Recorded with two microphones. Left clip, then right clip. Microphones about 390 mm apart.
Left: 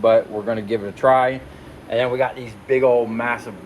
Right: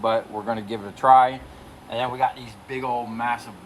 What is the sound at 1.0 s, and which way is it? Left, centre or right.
Speech, centre.